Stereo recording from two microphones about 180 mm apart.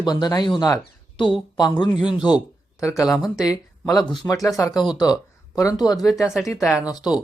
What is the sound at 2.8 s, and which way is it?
Speech, 15° left (ahead or behind).